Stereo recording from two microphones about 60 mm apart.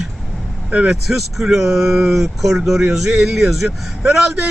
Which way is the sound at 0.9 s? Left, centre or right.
Centre.